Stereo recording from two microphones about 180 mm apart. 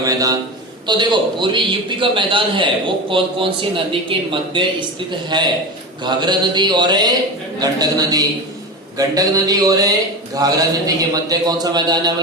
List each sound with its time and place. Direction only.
0.0 s a man's voice: 20° right (ahead or behind)